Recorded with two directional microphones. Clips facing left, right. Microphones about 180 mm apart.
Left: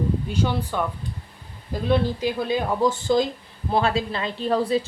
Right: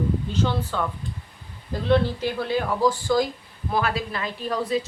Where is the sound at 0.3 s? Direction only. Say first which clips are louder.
Left 1 dB; 15° left (ahead or behind).